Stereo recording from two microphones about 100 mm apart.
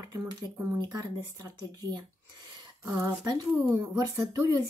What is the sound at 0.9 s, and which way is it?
Speech, 35° right (ahead or behind).